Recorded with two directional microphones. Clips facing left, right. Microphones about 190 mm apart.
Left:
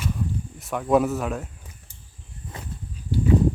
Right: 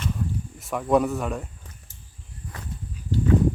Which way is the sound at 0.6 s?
Centre (ahead or behind).